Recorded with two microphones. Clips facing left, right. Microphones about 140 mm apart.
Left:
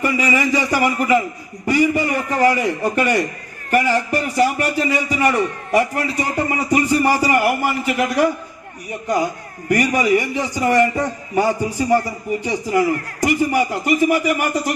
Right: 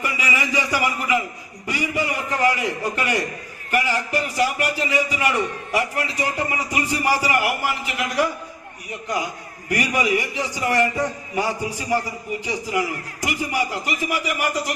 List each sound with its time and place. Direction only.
0.0 s a man's voice: 40° left (ahead or behind)